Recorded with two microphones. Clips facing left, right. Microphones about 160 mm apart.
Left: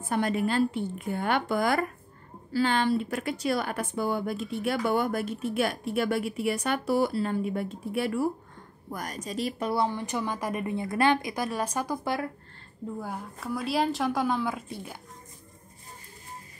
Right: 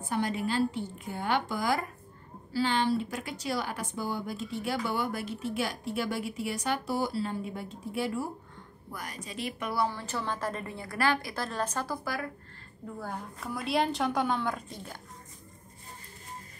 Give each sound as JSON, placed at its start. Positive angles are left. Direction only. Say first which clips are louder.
{"t": 0.1, "sound": "a woman's voice", "louder": "left 4 dB", "side_deg": 55}
{"t": 8.9, "sound": "a woman's voice", "louder": "left 6 dB", "side_deg": 45}
{"t": 13.0, "sound": "a woman's voice", "louder": "left 2 dB", "side_deg": 5}